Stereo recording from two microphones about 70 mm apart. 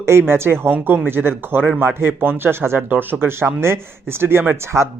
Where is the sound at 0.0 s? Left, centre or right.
Right.